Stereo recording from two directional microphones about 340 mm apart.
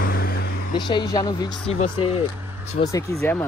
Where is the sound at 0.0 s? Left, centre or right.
Left.